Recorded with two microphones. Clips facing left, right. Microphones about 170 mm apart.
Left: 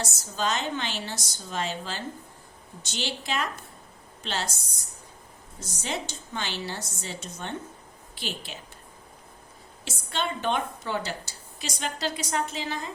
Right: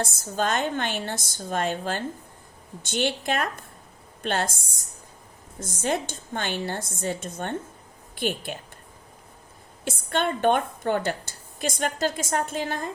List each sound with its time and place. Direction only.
0.0 s a woman's voice: 55° right (ahead or behind)
9.8 s a woman's voice: 50° right (ahead or behind)